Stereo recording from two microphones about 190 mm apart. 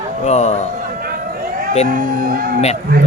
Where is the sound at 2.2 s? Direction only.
45° right (ahead or behind).